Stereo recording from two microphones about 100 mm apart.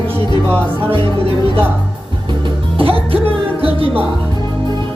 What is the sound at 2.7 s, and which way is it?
Music, 65° right (ahead or behind).